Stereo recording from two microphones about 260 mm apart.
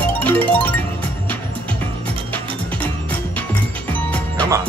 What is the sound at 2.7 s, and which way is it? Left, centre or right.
Music, centre.